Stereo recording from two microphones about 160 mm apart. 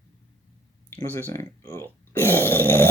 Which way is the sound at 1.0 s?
15° left (ahead or behind).